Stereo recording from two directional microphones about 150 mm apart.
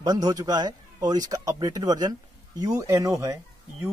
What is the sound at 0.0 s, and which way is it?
Speech, 25° right (ahead or behind).